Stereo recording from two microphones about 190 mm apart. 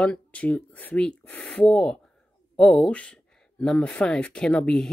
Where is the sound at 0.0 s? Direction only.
5° left (ahead or behind).